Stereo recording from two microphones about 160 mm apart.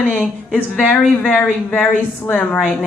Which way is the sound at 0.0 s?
5° right (ahead or behind).